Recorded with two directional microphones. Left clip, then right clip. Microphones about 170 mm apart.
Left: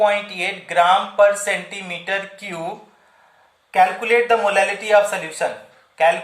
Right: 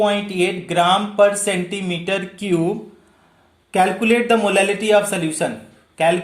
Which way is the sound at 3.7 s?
45° right (ahead or behind).